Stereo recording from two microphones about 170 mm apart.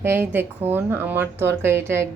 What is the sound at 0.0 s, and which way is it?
A woman's voice, 15° right (ahead or behind).